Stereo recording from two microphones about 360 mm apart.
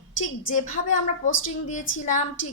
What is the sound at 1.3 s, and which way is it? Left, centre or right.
Speech, left.